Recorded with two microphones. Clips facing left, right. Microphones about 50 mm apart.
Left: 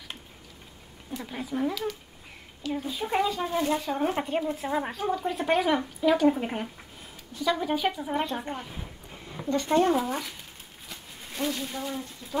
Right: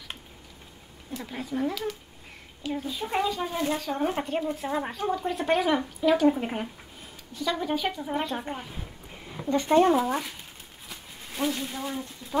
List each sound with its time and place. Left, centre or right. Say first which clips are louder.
1.1 s speech: even; centre
9.5 s speech: right 3 dB; centre
11.3 s speech: right 1 dB; centre